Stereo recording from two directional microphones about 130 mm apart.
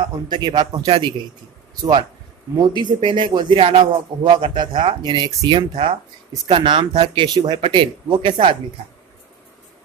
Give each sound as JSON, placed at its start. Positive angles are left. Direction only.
{"t": 0.3, "sound": "a man's voice", "side_deg": -35}